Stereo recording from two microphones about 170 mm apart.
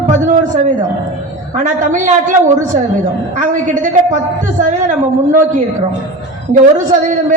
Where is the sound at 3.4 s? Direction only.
50° right (ahead or behind).